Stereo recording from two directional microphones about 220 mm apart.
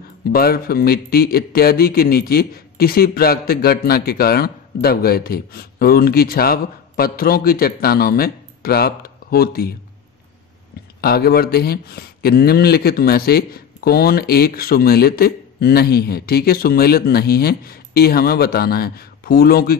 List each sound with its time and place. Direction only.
0.2 s speech: 45° left (ahead or behind)
11.0 s speech: 45° left (ahead or behind)